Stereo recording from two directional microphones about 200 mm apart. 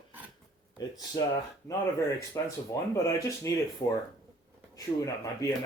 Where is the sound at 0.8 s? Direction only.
20° left (ahead or behind).